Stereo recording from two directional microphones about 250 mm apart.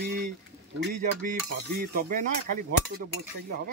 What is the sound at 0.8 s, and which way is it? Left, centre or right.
Speech, right.